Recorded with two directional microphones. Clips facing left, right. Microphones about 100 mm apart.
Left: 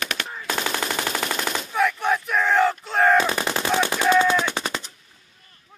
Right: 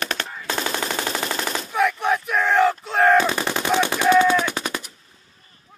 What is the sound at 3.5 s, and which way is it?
Machine gun, 15° right (ahead or behind).